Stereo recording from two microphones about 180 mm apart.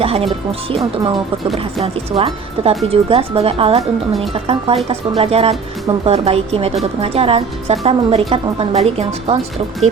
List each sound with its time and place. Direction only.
0.0 s speech: 35° right (ahead or behind)
1.5 s speech: 30° right (ahead or behind)